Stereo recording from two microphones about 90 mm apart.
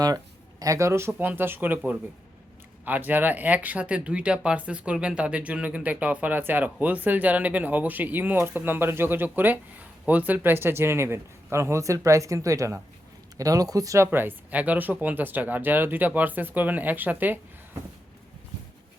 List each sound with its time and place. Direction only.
0.6 s speech: 35° right (ahead or behind)
2.8 s speech: 20° right (ahead or behind)